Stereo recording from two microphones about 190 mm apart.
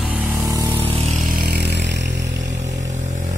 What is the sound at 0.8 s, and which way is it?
Vehicle, 30° right (ahead or behind).